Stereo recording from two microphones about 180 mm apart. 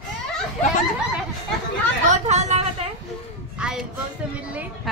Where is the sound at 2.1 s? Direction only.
40° right (ahead or behind).